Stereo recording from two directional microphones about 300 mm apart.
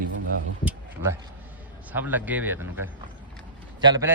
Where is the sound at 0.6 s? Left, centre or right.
Centre.